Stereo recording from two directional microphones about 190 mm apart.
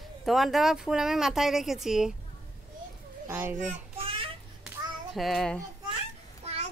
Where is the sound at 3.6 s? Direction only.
30° right (ahead or behind).